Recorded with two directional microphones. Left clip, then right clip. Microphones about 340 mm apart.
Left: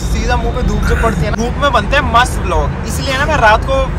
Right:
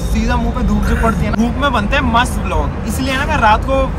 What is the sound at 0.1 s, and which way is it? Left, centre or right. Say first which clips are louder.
Music: left 2 dB; centre.